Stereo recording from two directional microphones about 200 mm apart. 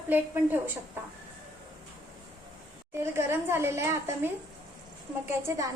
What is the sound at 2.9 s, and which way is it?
A woman's voice, 10° right (ahead or behind).